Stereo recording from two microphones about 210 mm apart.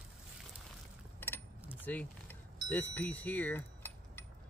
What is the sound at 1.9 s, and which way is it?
Speech, 10° left (ahead or behind).